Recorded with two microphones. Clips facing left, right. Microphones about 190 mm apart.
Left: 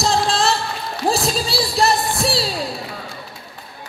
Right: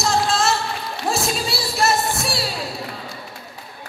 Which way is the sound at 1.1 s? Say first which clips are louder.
Left 3 dB; 35° left (ahead or behind).